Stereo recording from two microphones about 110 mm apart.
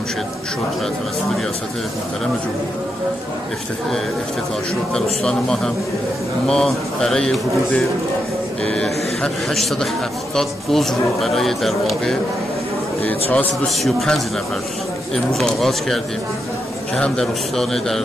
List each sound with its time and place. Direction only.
4.9 s speech: 5° left (ahead or behind)
13.0 s a man's voice: 15° left (ahead or behind)
13.8 s speech: centre (ahead or behind)
15.3 s speech: centre (ahead or behind)